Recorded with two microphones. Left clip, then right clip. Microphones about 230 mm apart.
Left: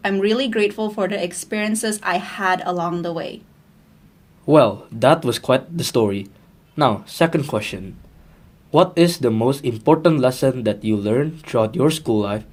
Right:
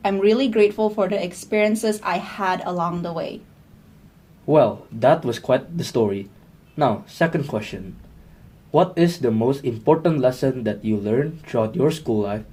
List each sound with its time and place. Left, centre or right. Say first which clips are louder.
0.0 s speech: right 1 dB; left
4.4 s speech: left 3 dB; left